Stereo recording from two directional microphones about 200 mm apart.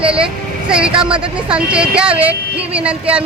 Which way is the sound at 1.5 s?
5° right (ahead or behind).